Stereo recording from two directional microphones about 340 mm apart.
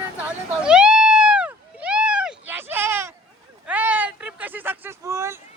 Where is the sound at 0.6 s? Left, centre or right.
Centre.